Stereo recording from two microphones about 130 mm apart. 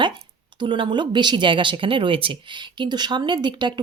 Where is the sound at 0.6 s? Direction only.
40° right (ahead or behind).